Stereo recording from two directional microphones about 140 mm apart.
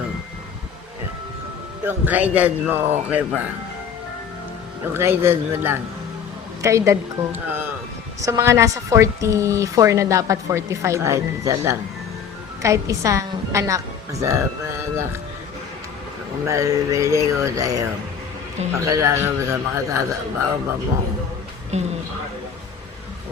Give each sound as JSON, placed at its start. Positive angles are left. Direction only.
{"t": 1.8, "sound": "speech", "side_deg": -15}
{"t": 4.9, "sound": "a woman's voice", "side_deg": -15}
{"t": 16.5, "sound": "a woman's voice", "side_deg": -25}
{"t": 21.7, "sound": "speech", "side_deg": -50}